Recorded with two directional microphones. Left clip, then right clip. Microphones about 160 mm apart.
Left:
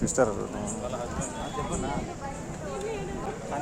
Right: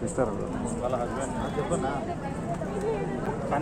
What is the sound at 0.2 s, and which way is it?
Speech, 90° left.